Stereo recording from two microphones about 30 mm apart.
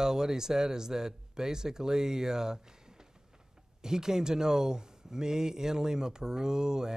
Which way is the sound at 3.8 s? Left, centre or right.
Centre.